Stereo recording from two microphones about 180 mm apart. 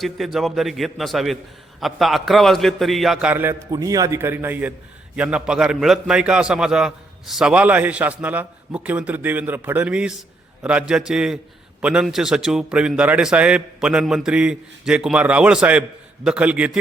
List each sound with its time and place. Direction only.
0.3 s a man's voice: centre (ahead or behind)